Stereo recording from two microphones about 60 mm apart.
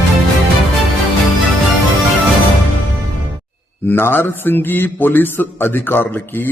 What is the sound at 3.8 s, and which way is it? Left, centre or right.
Speech, left.